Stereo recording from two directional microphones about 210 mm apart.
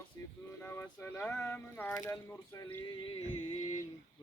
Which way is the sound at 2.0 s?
15° left (ahead or behind).